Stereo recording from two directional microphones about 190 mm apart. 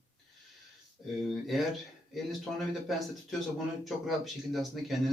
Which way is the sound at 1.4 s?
Centre (ahead or behind).